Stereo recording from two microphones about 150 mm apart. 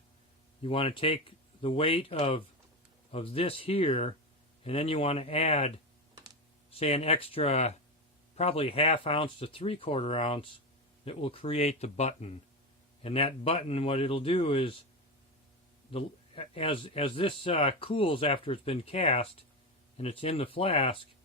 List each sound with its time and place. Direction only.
0.6 s speech: 40° left (ahead or behind)
15.9 s speech: 40° left (ahead or behind)